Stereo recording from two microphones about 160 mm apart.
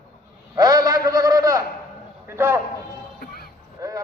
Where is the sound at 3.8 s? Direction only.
20° right (ahead or behind).